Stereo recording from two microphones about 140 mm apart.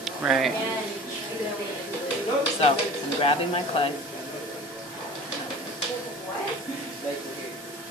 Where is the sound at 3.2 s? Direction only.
40° left (ahead or behind).